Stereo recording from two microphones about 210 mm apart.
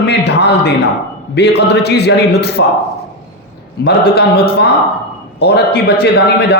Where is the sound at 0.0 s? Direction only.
50° left (ahead or behind).